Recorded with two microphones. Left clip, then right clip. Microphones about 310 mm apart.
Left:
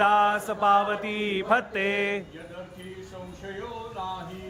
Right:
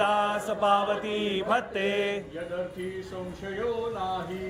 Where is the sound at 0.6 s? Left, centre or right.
Left.